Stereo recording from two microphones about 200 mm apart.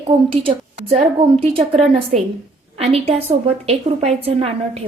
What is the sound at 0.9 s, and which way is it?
A woman's voice, 25° right (ahead or behind).